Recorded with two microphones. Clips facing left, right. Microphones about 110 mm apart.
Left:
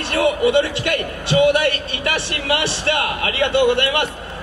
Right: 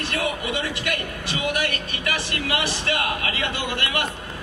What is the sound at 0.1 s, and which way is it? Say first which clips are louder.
A man's voice: left 13 dB; 30° left (ahead or behind).